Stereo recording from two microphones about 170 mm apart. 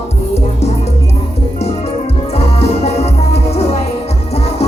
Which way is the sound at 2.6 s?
35° left (ahead or behind).